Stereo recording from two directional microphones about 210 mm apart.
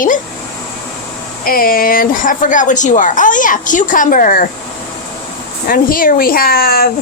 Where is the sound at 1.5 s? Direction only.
45° left (ahead or behind).